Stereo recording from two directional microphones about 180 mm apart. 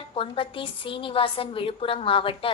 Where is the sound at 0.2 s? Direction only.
30° left (ahead or behind).